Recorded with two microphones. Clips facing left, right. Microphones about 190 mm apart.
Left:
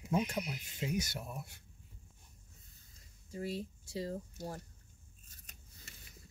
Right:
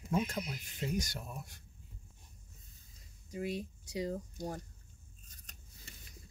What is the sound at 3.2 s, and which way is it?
Speech, 15° right (ahead or behind).